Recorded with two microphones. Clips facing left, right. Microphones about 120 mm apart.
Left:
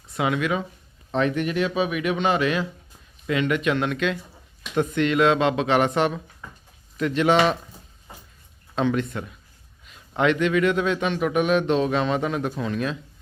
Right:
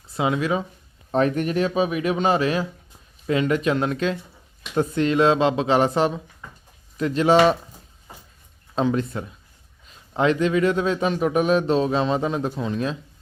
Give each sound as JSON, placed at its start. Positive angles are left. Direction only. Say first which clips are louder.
{"t": 0.1, "sound": "a man's voice", "louder": "right 1 dB", "side_deg": -30}
{"t": 7.3, "sound": "speech", "louder": "right 7 dB", "side_deg": -5}
{"t": 8.7, "sound": "a man's voice", "louder": "right 1 dB", "side_deg": -35}